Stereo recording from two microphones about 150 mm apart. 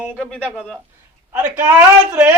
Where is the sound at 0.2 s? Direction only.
5° left (ahead or behind).